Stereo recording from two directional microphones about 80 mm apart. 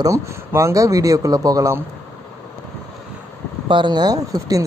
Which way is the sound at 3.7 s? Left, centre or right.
Right.